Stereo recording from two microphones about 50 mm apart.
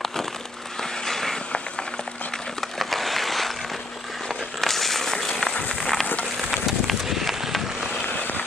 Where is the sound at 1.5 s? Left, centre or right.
Centre.